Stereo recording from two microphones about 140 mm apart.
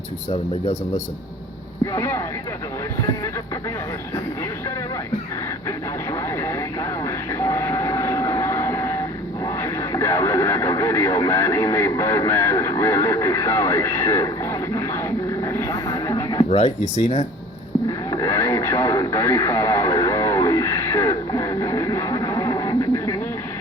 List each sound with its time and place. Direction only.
1.9 s speech: 20° left (ahead or behind)
5.6 s speech: 20° left (ahead or behind)
7.0 s vehicle: 20° left (ahead or behind)
9.4 s speech: 25° left (ahead or behind)
15.4 s a sound: 20° left (ahead or behind)
16.5 s speech: 50° left (ahead or behind)
18.1 s radio: 25° left (ahead or behind)